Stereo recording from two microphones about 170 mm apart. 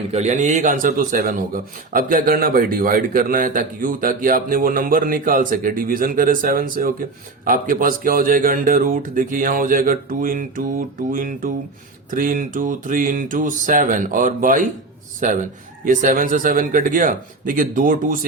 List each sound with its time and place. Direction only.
0.1 s a man's voice: 40° right (ahead or behind)